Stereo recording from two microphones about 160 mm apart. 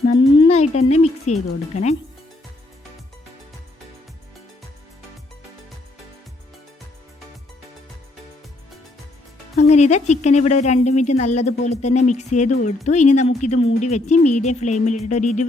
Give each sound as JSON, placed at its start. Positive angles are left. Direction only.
{"t": 0.2, "sound": "speech", "side_deg": 35}
{"t": 9.6, "sound": "speech", "side_deg": 45}